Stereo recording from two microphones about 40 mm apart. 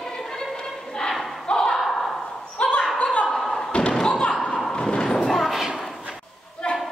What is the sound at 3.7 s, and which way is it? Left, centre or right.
Thump, left.